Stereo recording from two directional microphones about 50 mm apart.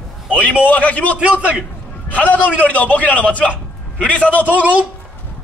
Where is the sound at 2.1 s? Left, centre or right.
Left.